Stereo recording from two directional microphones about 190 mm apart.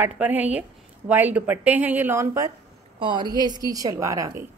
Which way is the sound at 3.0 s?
25° right (ahead or behind).